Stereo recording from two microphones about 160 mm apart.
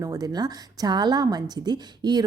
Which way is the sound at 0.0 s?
20° right (ahead or behind).